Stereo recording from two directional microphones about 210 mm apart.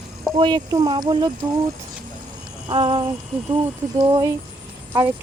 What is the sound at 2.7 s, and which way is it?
Speech, 20° right (ahead or behind).